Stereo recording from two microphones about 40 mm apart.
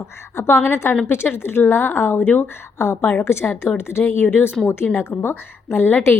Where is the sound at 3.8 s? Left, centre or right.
Left.